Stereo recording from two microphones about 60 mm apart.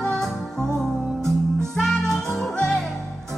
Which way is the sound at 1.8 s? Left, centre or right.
Centre.